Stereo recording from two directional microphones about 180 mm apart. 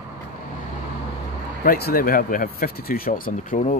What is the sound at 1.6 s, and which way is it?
Speech, 60° left (ahead or behind).